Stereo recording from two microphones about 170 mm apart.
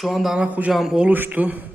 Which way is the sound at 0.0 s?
Centre (ahead or behind).